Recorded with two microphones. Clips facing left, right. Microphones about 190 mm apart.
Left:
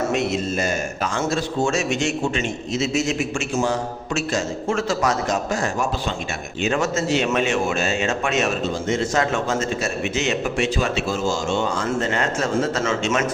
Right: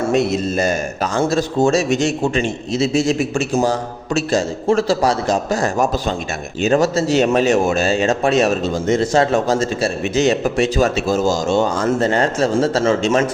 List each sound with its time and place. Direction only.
0.1 s speech: 35° right (ahead or behind)